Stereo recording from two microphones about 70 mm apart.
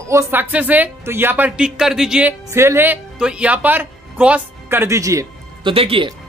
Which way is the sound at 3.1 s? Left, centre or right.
Centre.